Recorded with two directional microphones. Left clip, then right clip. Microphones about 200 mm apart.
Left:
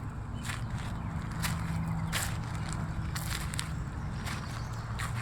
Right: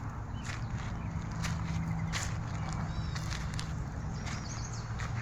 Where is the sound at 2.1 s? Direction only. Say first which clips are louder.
Left 4 dB; 45° left (ahead or behind).